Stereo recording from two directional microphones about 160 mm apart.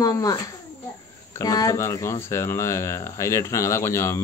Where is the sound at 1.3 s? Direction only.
20° left (ahead or behind).